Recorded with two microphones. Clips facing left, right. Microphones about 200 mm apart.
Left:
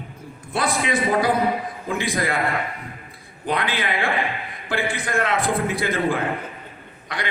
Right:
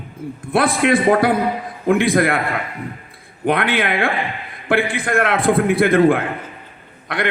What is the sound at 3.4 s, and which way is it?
A man's voice, 55° right (ahead or behind).